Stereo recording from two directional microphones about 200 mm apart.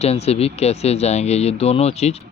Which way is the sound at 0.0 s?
30° left (ahead or behind).